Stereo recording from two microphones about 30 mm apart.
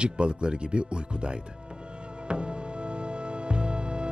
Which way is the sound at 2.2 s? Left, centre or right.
Right.